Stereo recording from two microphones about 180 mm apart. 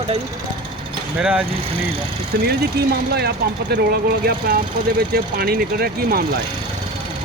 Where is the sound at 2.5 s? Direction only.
65° right (ahead or behind).